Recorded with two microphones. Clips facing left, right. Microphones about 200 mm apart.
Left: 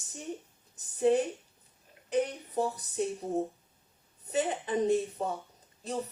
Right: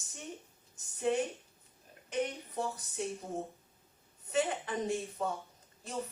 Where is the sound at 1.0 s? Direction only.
35° left (ahead or behind).